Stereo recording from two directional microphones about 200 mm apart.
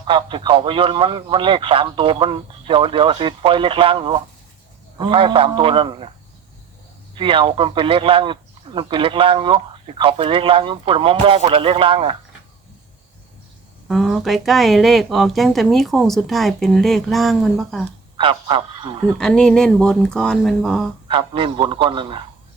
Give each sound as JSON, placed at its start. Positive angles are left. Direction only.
{"t": 0.1, "sound": "speech", "side_deg": -25}
{"t": 7.2, "sound": "speech", "side_deg": -25}
{"t": 13.8, "sound": "speech", "side_deg": 0}
{"t": 18.2, "sound": "speech", "side_deg": -25}
{"t": 19.0, "sound": "speech", "side_deg": 5}
{"t": 21.1, "sound": "speech", "side_deg": -25}